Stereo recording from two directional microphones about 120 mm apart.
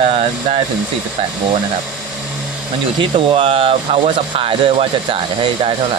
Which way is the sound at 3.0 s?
45° right (ahead or behind).